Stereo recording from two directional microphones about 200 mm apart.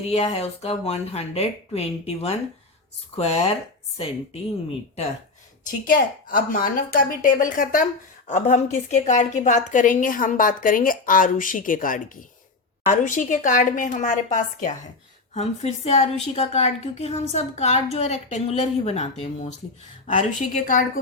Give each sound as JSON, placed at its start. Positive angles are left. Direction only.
{"t": 0.1, "sound": "a woman's voice", "side_deg": 30}
{"t": 5.9, "sound": "a woman's voice", "side_deg": 45}
{"t": 20.1, "sound": "a woman's voice", "side_deg": 40}